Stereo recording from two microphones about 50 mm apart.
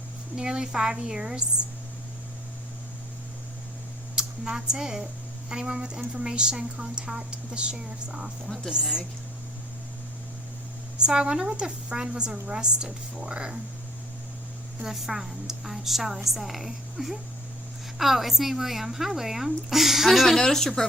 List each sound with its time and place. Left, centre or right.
0.3 s a woman's voice: centre
4.2 s a woman's voice: centre
10.9 s a woman's voice: centre
14.8 s speech: centre